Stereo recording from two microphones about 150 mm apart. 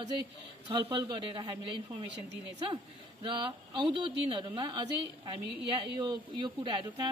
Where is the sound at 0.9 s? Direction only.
30° right (ahead or behind).